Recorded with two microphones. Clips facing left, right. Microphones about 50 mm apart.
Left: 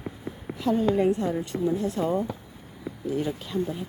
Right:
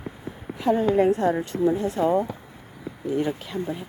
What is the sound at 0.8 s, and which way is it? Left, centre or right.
Speech, right.